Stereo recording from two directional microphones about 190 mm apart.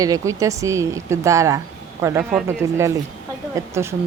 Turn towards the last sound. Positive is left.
turn(degrees=-15)  # may be behind; listen again after turning